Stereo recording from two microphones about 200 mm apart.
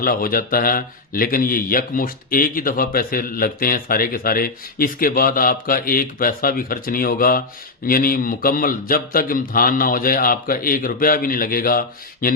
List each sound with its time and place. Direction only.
0.0 s speech: 45° left (ahead or behind)